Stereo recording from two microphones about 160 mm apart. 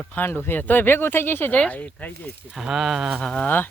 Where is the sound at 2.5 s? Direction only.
5° right (ahead or behind).